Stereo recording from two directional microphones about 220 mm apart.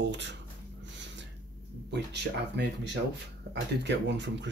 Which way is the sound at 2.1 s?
50° right (ahead or behind).